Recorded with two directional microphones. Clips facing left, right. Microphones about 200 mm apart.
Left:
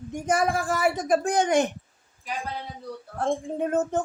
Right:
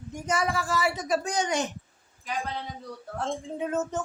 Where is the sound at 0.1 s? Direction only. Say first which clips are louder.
Left 4 dB; 50° left (ahead or behind).